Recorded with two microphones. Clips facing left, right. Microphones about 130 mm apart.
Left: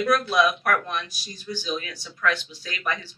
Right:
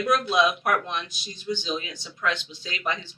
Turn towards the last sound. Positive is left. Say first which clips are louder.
# even
turn(degrees=-20)  # may be behind; listen again after turning